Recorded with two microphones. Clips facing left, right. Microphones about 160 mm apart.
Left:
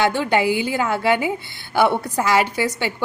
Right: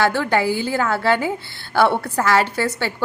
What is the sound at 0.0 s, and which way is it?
A woman's voice, 20° left (ahead or behind).